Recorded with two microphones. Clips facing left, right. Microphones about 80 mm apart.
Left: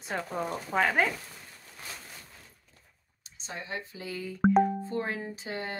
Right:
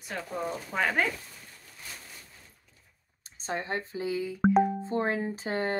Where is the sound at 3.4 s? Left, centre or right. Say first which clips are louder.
Right 6 dB; right.